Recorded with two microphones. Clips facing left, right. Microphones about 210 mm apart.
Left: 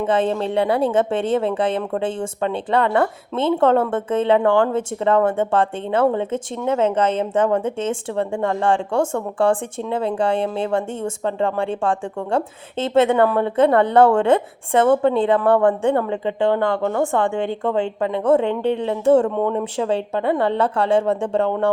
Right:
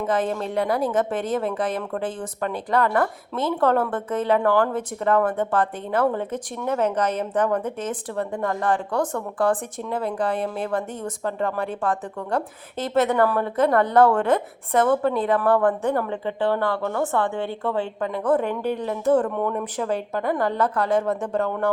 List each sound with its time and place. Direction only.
0.0 s speech: 30° left (ahead or behind)